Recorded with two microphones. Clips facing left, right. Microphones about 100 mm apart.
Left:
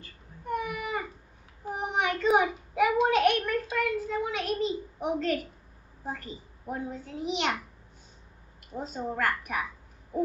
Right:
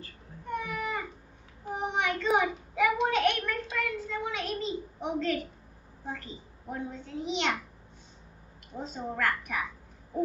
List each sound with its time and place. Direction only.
0.5 s a sound: 10° left (ahead or behind)
6.0 s a child's voice: 5° left (ahead or behind)
8.7 s a child's voice: 5° left (ahead or behind)